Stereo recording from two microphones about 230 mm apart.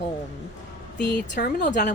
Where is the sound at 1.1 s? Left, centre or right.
Left.